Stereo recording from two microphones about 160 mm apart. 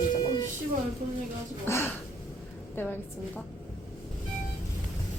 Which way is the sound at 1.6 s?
15° left (ahead or behind).